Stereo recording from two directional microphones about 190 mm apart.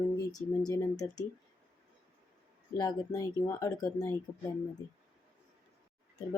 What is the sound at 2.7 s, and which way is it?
Speech, 20° left (ahead or behind).